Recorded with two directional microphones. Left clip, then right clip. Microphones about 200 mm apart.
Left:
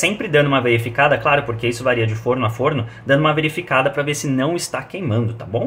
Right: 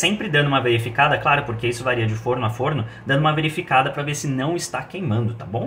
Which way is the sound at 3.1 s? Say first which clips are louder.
Left 4 dB; 25° left (ahead or behind).